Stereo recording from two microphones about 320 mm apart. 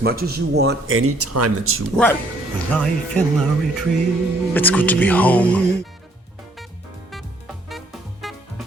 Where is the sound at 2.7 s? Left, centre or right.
Centre.